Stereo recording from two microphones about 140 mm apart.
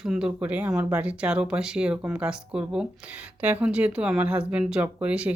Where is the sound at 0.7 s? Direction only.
20° right (ahead or behind).